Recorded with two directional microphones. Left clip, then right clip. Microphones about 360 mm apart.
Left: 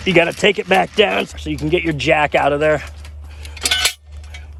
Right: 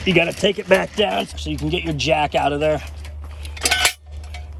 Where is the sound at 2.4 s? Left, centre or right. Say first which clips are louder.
Left 4 dB; left.